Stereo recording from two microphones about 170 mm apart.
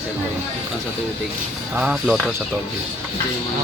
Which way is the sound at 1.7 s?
5° right (ahead or behind).